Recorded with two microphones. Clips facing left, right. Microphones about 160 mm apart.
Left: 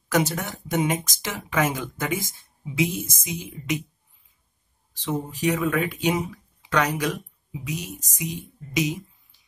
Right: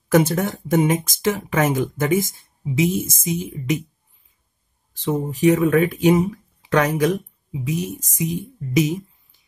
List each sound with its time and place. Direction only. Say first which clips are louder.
0.1 s speech: right 7 dB; 55° right (ahead or behind)
4.9 s speech: right 5 dB; 50° right (ahead or behind)